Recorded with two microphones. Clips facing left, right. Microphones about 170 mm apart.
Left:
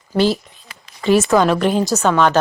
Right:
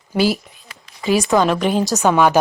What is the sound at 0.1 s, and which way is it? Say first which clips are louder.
Speech: left 1 dB; 10° right (ahead or behind).